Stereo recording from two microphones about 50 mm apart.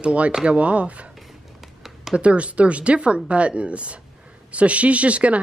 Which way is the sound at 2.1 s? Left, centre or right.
Right.